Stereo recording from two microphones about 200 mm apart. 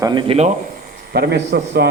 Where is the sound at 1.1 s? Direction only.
55° right (ahead or behind).